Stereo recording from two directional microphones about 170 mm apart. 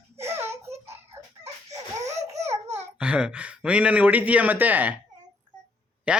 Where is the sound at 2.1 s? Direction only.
40° right (ahead or behind).